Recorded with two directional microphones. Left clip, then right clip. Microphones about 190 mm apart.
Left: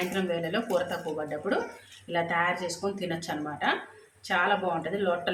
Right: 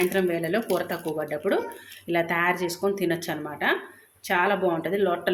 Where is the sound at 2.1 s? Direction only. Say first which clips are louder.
Right 3 dB; 40° right (ahead or behind).